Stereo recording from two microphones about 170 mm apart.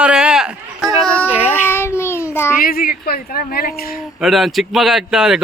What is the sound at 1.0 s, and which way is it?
A child's voice, 10° left (ahead or behind).